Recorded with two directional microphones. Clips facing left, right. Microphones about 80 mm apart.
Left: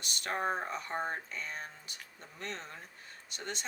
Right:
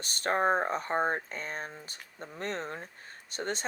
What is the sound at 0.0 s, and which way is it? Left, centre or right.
Speech, right.